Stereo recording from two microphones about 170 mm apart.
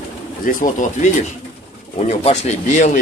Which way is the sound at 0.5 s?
50° left (ahead or behind).